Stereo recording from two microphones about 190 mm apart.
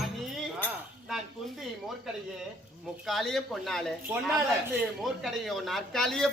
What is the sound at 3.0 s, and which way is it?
Speech, centre (ahead or behind).